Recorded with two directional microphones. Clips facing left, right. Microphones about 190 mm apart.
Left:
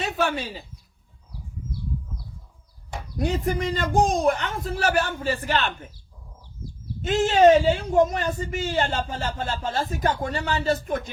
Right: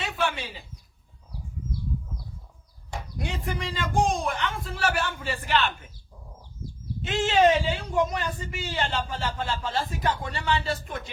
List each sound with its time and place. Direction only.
0.0 s speech: 40° left (ahead or behind)
3.2 s speech: 40° left (ahead or behind)
7.0 s a man's voice: 45° left (ahead or behind)